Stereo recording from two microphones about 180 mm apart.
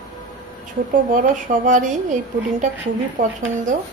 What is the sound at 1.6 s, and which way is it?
Speech, 45° right (ahead or behind).